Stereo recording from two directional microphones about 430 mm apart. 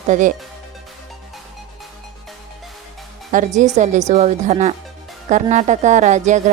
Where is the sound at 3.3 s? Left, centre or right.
Centre.